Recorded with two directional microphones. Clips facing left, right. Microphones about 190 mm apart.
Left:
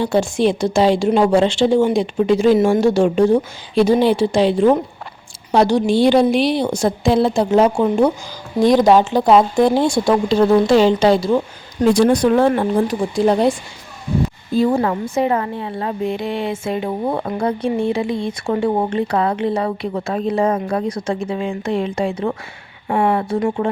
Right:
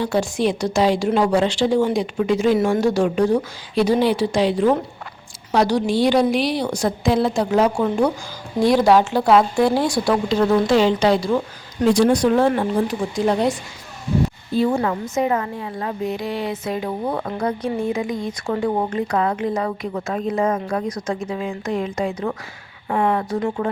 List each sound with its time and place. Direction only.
0.0 s a woman's voice: 25° left (ahead or behind)
11.9 s speech: 60° left (ahead or behind)
13.1 s speech: 30° left (ahead or behind)
14.6 s a woman's voice: 35° left (ahead or behind)